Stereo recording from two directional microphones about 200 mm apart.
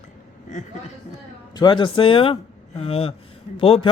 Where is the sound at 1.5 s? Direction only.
25° left (ahead or behind).